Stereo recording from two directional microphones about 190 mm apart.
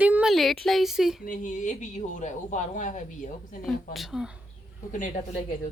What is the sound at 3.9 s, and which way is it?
Speech, centre (ahead or behind).